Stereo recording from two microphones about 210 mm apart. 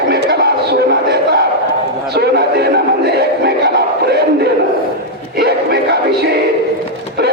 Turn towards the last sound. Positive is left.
turn(degrees=-50)  # may be behind; listen again after turning